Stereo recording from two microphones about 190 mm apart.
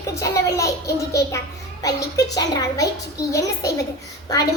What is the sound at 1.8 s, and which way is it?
A child's voice, 20° left (ahead or behind).